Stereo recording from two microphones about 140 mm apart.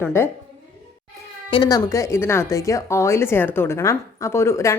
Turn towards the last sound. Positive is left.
turn(degrees=20)  # may be behind; listen again after turning